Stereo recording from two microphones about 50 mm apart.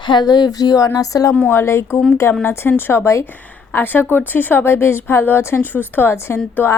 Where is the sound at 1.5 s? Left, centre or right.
Left.